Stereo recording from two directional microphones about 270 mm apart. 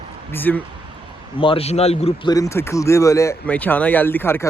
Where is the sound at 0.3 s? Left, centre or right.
Centre.